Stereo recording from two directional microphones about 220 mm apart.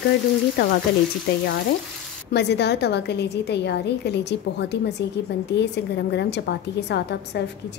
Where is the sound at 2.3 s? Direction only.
50° left (ahead or behind).